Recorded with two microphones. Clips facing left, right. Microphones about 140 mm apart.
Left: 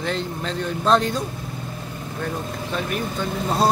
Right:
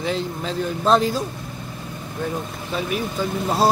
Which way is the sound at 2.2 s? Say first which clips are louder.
Right 1 dB; 5° right (ahead or behind).